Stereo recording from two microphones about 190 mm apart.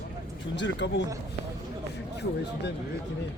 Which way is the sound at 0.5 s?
70° left (ahead or behind).